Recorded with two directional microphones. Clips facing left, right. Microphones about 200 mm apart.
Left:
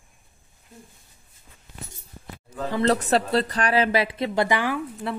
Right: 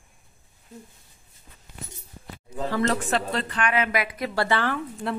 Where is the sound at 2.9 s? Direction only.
35° left (ahead or behind); by 4.8 s 15° left (ahead or behind).